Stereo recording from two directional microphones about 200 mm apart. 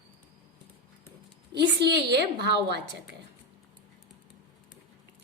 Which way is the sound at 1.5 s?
55° right (ahead or behind).